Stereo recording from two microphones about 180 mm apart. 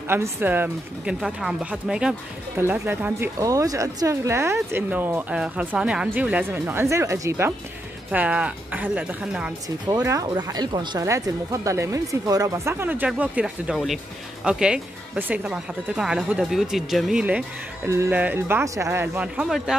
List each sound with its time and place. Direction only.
0.1 s speech: 10° right (ahead or behind)
9.8 s speech: 20° right (ahead or behind); by 19.7 s 5° right (ahead or behind)